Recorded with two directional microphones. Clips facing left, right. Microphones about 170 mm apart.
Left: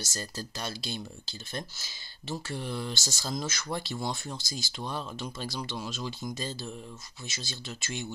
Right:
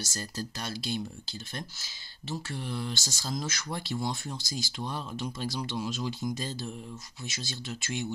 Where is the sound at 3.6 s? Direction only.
10° right (ahead or behind).